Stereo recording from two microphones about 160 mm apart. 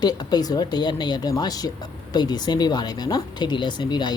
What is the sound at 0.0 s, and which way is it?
Speech, 25° left (ahead or behind).